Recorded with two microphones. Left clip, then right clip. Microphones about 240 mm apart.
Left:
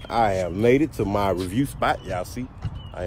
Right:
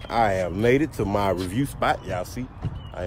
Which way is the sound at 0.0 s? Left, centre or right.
Centre.